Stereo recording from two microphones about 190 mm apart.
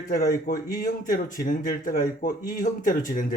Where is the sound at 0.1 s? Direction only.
50° left (ahead or behind).